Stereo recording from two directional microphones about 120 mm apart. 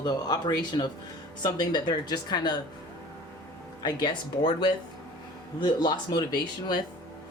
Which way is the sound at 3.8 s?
40° left (ahead or behind).